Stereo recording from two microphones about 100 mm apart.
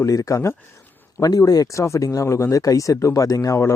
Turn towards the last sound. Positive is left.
turn(degrees=30)  # may be behind; listen again after turning